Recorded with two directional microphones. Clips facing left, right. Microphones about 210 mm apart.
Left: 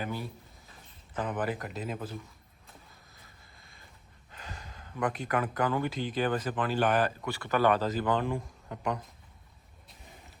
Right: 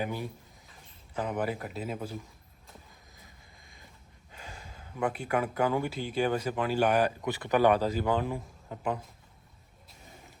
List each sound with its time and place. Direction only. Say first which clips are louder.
0.0 s speech: right 2 dB; 15° right (ahead or behind)
4.3 s speech: left 1 dB; 10° right (ahead or behind)